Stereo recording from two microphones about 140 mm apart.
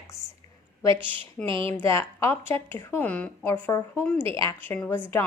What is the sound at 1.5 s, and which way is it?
Speech, 35° right (ahead or behind).